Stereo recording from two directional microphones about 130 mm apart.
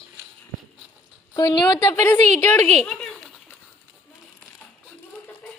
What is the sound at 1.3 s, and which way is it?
Speech, 30° left (ahead or behind).